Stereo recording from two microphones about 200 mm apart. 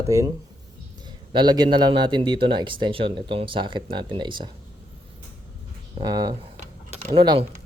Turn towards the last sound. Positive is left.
turn(degrees=-25)  # may be behind; listen again after turning